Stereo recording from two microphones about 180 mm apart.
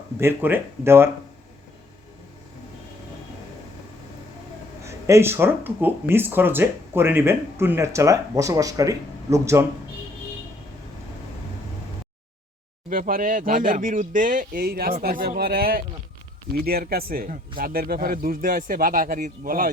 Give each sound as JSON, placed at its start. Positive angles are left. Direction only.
{"t": 0.2, "sound": "speech", "side_deg": -10}
{"t": 4.9, "sound": "speech", "side_deg": -15}
{"t": 12.9, "sound": "speech", "side_deg": -50}